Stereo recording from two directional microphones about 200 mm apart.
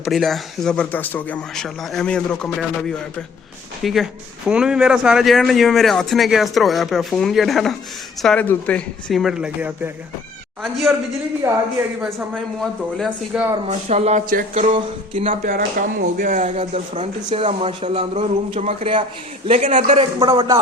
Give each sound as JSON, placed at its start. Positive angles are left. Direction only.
{"t": 0.0, "sound": "a man's voice", "side_deg": 0}
{"t": 3.8, "sound": "a man's voice", "side_deg": 0}
{"t": 11.4, "sound": "speech", "side_deg": -15}
{"t": 13.0, "sound": "a man's voice", "side_deg": -5}
{"t": 13.7, "sound": "speech", "side_deg": -35}
{"t": 14.5, "sound": "a sound", "side_deg": -30}
{"t": 15.3, "sound": "speech", "side_deg": -45}
{"t": 20.1, "sound": "a sound", "side_deg": -25}